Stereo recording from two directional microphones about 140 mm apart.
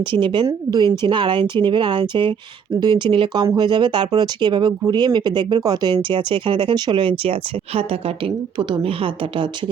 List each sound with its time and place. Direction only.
0.1 s speech: 35° right (ahead or behind)
8.5 s speech: 40° right (ahead or behind)